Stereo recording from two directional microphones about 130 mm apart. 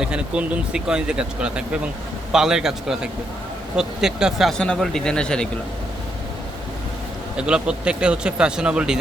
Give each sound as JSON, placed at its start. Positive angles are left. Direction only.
{"t": 0.0, "sound": "speech", "side_deg": -5}
{"t": 7.3, "sound": "speech", "side_deg": -5}